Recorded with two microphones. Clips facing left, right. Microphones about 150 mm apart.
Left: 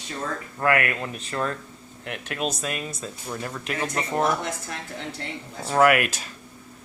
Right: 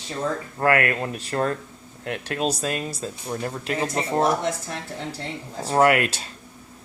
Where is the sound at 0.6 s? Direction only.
35° right (ahead or behind).